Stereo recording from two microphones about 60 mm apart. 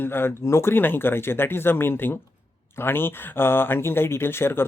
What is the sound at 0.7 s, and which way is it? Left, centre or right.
Speech, left.